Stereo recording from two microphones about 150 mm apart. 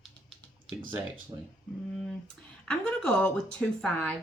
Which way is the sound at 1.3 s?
25° right (ahead or behind).